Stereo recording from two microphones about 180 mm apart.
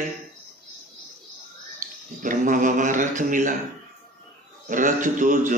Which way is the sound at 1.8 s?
45° right (ahead or behind).